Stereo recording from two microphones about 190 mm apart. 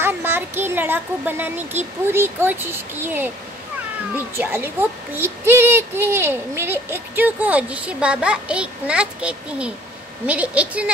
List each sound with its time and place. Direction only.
0.0 s a child's voice: 10° right (ahead or behind)